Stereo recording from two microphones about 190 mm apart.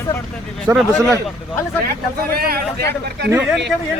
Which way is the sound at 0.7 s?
15° right (ahead or behind).